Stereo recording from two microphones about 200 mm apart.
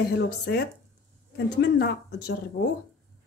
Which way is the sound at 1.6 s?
55° left (ahead or behind).